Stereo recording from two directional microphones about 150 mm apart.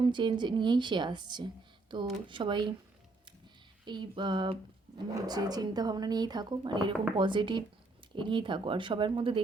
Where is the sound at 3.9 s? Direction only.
30° right (ahead or behind).